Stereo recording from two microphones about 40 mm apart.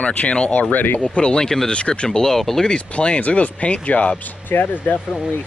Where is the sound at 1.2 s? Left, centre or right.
Centre.